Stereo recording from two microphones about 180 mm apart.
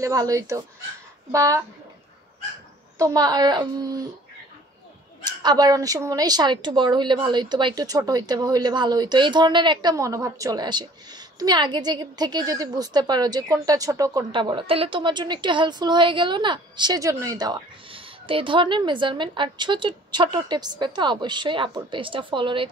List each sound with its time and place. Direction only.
0.0 s speech: 20° right (ahead or behind)
3.0 s a woman's voice: 20° right (ahead or behind)
5.2 s a woman's voice: 25° right (ahead or behind)